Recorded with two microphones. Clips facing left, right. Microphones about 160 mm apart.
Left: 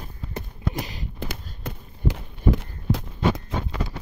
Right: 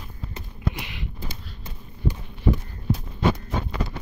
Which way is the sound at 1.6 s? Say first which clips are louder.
Left 1 dB; 90° left.